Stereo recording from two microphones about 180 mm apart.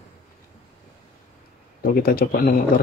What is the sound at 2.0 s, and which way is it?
Speech, 55° left (ahead or behind).